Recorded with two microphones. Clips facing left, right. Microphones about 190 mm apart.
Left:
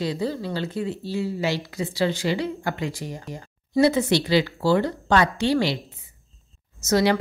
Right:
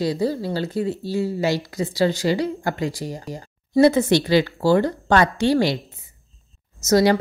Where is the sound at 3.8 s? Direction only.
50° right (ahead or behind).